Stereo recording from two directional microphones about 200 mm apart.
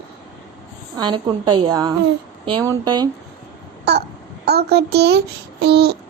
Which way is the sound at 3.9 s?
55° right (ahead or behind).